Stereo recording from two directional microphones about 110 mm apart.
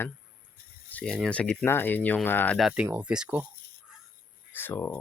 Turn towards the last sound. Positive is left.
turn(degrees=15)  # may be behind; listen again after turning